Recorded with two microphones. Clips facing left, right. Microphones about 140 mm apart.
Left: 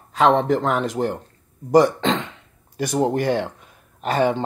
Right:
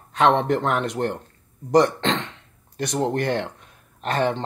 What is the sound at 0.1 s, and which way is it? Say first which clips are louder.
Speech: left 2 dB; centre (ahead or behind).